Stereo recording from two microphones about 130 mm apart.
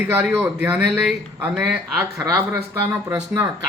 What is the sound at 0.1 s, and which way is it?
Speech, 15° right (ahead or behind).